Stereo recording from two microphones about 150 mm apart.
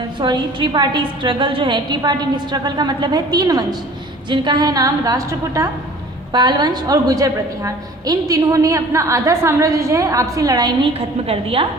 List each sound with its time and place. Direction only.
0.2 s a woman's voice: 30° right (ahead or behind)
10.9 s a woman's voice: 40° right (ahead or behind)